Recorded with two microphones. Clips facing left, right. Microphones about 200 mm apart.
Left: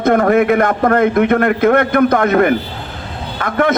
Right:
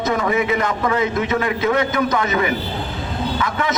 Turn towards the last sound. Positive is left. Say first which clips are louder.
# left 5 dB
turn(degrees=55)  # may be behind; listen again after turning